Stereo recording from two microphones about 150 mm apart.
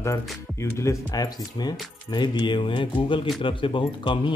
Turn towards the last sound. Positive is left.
turn(degrees=35)  # may be behind; listen again after turning